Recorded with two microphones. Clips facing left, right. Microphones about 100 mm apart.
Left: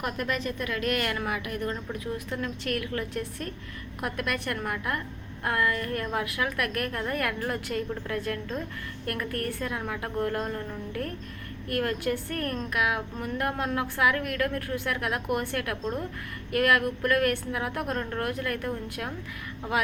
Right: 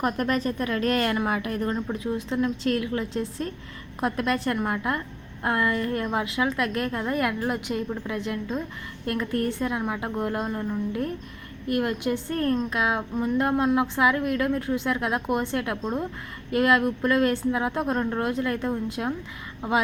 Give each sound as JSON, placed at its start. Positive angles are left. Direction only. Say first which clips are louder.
{"t": 0.0, "sound": "a woman's voice", "louder": "right 5 dB", "side_deg": -40}